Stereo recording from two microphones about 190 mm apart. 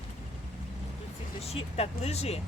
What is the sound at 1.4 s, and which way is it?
Speech, 30° left (ahead or behind).